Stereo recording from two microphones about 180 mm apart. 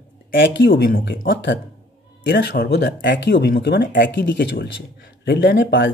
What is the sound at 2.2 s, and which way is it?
Speech, 70° left (ahead or behind).